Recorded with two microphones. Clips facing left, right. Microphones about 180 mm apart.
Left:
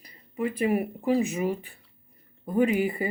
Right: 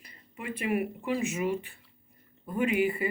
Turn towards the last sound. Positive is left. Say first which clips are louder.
# left 3 dB
turn(degrees=40)  # may be behind; listen again after turning